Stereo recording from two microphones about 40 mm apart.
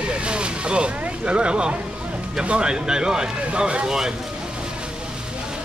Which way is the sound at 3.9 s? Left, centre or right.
Centre.